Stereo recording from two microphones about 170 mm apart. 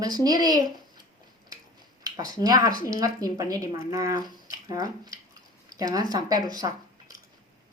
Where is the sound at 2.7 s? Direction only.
55° left (ahead or behind).